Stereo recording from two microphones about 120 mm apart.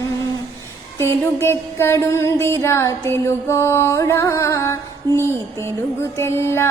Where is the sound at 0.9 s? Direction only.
20° left (ahead or behind).